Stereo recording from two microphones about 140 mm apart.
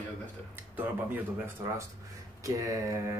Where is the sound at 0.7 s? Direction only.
15° right (ahead or behind).